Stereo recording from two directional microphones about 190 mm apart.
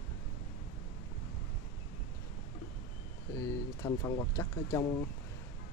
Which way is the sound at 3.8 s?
10° left (ahead or behind).